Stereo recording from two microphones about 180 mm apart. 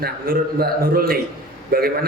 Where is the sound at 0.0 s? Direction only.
55° right (ahead or behind).